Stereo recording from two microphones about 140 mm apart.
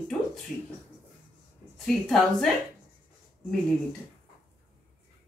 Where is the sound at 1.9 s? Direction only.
5° left (ahead or behind).